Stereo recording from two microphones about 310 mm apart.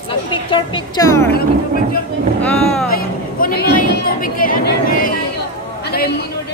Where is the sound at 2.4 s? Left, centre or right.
Centre.